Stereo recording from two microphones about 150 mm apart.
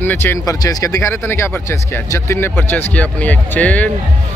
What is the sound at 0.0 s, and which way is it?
Speech, 15° left (ahead or behind).